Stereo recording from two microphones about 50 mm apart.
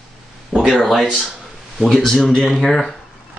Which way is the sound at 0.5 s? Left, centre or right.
Centre.